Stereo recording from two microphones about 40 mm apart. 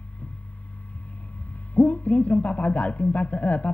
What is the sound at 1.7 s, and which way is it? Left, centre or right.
Speech, left.